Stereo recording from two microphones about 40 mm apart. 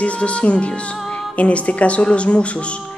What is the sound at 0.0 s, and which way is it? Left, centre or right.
Speech, left.